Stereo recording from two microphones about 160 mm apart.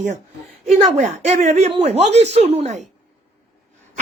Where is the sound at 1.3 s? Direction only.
45° right (ahead or behind).